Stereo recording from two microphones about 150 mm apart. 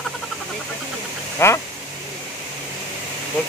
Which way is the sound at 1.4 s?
15° left (ahead or behind).